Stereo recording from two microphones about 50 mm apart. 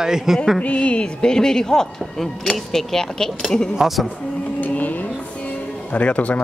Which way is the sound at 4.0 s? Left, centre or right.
Centre.